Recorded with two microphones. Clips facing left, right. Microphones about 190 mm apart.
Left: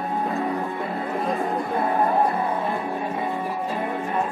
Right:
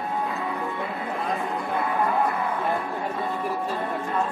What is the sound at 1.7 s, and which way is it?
Music, 35° left (ahead or behind).